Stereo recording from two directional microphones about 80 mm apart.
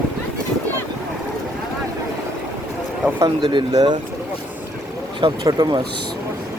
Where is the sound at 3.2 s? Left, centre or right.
Right.